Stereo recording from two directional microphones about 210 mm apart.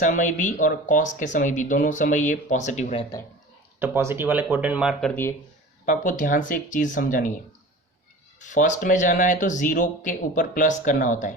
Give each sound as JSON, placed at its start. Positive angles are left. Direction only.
{"t": 0.0, "sound": "speech", "side_deg": 35}
{"t": 3.8, "sound": "speech", "side_deg": -10}
{"t": 5.8, "sound": "speech", "side_deg": 40}
{"t": 8.4, "sound": "speech", "side_deg": 35}